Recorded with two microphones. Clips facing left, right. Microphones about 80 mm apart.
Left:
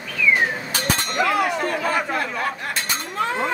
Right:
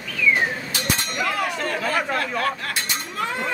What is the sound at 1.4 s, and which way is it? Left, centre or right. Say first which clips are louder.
Speech: left 3 dB; centre.